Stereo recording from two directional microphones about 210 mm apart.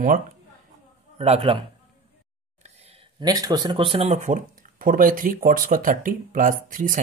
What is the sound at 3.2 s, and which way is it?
Speech, 20° right (ahead or behind).